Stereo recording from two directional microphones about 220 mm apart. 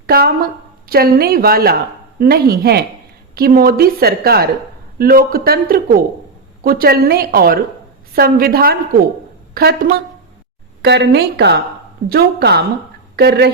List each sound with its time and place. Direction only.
0.1 s speech: 45° right (ahead or behind)